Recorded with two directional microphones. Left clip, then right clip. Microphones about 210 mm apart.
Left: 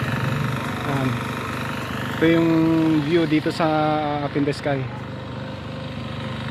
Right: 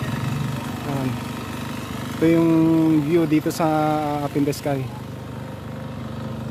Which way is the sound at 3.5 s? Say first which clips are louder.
Even; 20° right (ahead or behind).